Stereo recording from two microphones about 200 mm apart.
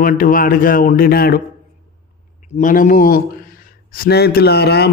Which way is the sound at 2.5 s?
40° left (ahead or behind).